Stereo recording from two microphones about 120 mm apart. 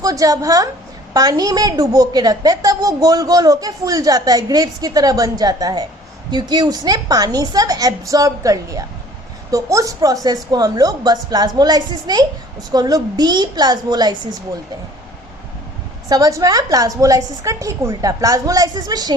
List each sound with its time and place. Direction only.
0.0 s a woman's voice: 30° right (ahead or behind)
16.0 s a woman's voice: 30° right (ahead or behind)